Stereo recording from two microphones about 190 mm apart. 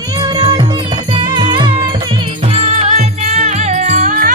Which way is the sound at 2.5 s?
35° right (ahead or behind).